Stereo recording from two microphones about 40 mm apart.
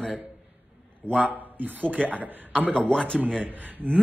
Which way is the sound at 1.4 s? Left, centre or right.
Right.